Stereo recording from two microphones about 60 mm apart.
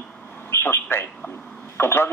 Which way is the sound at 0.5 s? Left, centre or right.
Left.